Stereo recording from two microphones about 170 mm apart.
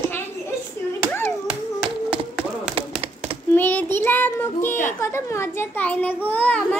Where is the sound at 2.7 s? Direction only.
30° right (ahead or behind).